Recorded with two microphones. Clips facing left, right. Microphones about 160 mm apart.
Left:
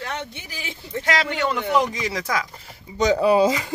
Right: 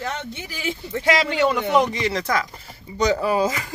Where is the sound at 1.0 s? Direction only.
Centre (ahead or behind).